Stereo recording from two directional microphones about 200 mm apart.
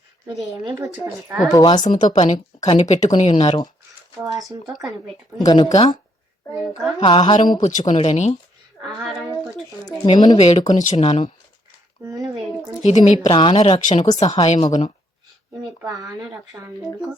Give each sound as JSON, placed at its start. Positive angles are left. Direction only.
{"t": 0.7, "sound": "a woman's voice", "side_deg": -10}
{"t": 1.5, "sound": "a woman's voice", "side_deg": 20}
{"t": 1.9, "sound": "speech", "side_deg": 40}
{"t": 2.6, "sound": "speech", "side_deg": 20}
{"t": 4.2, "sound": "a woman's voice", "side_deg": -15}
{"t": 5.4, "sound": "a woman's voice", "side_deg": 20}
{"t": 7.0, "sound": "a woman's voice", "side_deg": 25}
{"t": 7.6, "sound": "speech", "side_deg": 35}
{"t": 9.0, "sound": "speech", "side_deg": 0}
{"t": 9.8, "sound": "a woman's voice", "side_deg": 20}
{"t": 10.4, "sound": "speech", "side_deg": 35}
{"t": 12.8, "sound": "a woman's voice", "side_deg": 35}
{"t": 15.8, "sound": "a woman's voice", "side_deg": -15}